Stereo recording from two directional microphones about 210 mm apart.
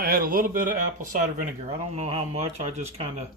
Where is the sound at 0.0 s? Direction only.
45° right (ahead or behind).